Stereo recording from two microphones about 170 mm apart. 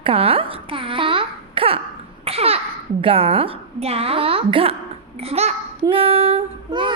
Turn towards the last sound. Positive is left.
turn(degrees=-30)  # may be behind; listen again after turning